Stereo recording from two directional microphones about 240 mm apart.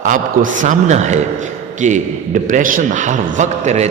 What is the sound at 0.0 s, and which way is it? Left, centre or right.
A man's voice, right.